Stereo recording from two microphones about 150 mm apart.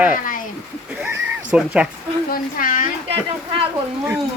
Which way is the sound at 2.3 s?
65° left (ahead or behind).